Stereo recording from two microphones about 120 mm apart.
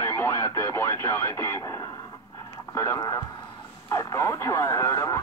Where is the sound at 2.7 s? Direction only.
25° left (ahead or behind).